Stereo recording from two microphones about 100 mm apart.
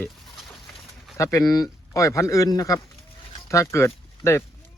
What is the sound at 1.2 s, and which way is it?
Speech, 35° left (ahead or behind).